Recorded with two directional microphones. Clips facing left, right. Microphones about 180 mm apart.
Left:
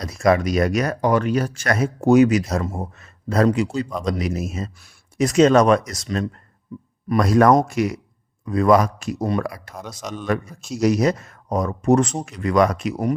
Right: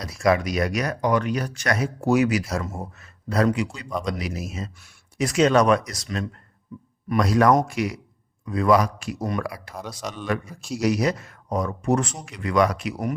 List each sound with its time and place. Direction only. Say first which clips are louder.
0.0 s speech: left 3 dB; 45° left (ahead or behind)
0.9 s speech: left 3 dB; 35° left (ahead or behind)
1.6 s speech: left 3 dB; 45° left (ahead or behind); by 3.8 s 30° left (ahead or behind)
4.2 s speech: left 5 dB; 50° left (ahead or behind)
7.1 s speech: left 3 dB; 50° left (ahead or behind)
10.2 s speech: left 4 dB; 45° left (ahead or behind)
10.5 s speech: even; centre (ahead or behind)
10.8 s speech: left 4 dB; 45° left (ahead or behind)